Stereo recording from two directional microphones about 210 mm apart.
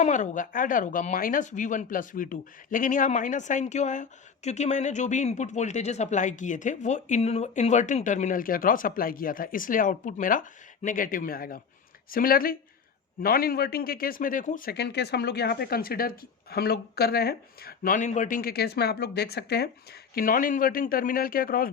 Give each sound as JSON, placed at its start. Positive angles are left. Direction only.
{"t": 0.0, "sound": "speech", "side_deg": 35}